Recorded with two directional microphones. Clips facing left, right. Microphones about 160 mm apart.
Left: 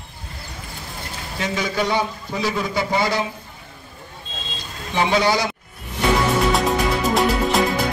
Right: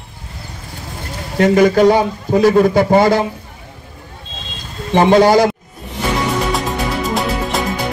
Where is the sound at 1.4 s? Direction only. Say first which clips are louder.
Right 14 dB; 55° right (ahead or behind).